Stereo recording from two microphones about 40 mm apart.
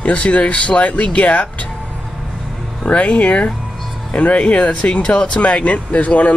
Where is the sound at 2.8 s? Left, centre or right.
Left.